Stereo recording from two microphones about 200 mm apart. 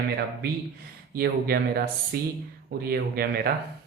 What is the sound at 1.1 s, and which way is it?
Speech, 50° right (ahead or behind).